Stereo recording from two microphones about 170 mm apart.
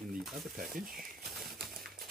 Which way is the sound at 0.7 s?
60° right (ahead or behind).